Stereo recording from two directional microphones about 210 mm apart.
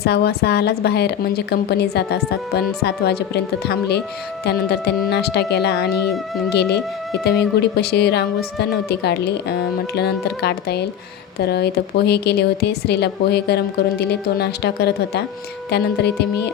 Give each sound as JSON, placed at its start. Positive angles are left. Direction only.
{"t": 0.0, "sound": "a woman's voice", "side_deg": 50}